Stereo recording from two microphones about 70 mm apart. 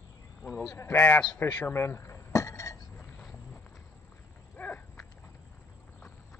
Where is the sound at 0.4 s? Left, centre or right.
Left.